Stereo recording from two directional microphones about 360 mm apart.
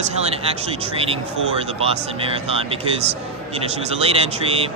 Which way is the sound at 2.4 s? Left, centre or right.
Centre.